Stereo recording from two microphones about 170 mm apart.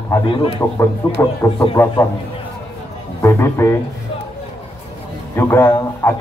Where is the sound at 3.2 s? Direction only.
15° left (ahead or behind).